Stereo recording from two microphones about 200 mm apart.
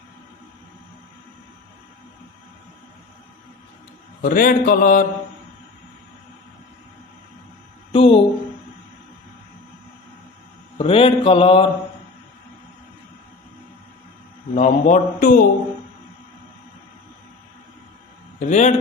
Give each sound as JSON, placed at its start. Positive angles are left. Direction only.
{"t": 4.2, "sound": "mantra", "side_deg": 45}
{"t": 7.9, "sound": "a sound", "side_deg": 25}
{"t": 10.8, "sound": "mantra", "side_deg": 25}
{"t": 14.5, "sound": "a man's voice", "side_deg": 35}
{"t": 18.3, "sound": "a man's voice", "side_deg": 35}